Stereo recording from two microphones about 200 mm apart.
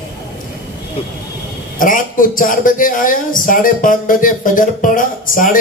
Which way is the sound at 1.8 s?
40° left (ahead or behind).